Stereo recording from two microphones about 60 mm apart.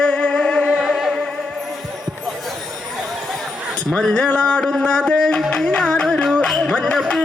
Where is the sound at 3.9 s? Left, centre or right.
Centre.